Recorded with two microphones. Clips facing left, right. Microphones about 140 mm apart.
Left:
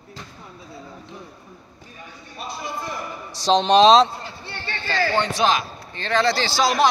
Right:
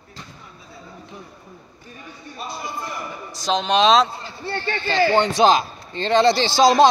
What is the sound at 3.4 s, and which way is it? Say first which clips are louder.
Speech: left 4 dB; 35° left (ahead or behind).